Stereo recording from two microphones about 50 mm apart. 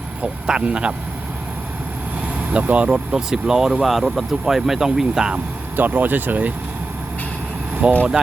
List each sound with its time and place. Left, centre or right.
0.2 s speech: right
2.5 s speech: right
3.2 s speech: centre
5.7 s speech: right
7.8 s speech: right